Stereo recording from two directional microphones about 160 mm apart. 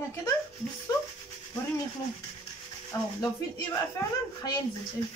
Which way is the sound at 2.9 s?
20° left (ahead or behind).